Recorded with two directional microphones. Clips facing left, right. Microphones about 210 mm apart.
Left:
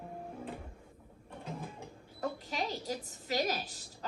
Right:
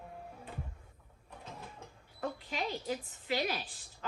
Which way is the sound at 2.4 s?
40° left (ahead or behind).